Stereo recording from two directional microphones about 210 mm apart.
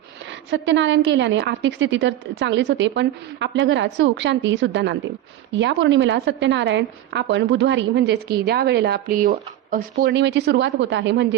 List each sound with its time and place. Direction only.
0.5 s a woman's voice: 60° right (ahead or behind)